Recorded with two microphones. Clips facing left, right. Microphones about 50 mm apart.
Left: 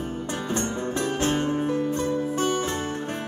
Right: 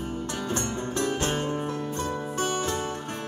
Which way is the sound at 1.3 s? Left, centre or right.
Centre.